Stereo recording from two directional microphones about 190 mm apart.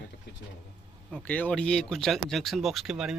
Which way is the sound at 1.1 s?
5° left (ahead or behind).